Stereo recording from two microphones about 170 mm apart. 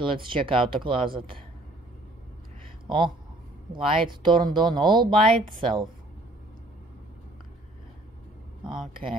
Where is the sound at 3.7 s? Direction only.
30° right (ahead or behind).